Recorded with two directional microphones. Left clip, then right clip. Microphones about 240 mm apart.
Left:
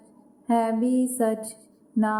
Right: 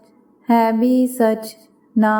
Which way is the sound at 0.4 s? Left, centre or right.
Right.